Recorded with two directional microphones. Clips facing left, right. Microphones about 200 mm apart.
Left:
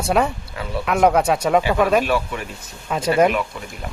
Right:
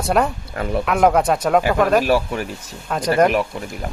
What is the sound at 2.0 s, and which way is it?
Speech, 40° right (ahead or behind).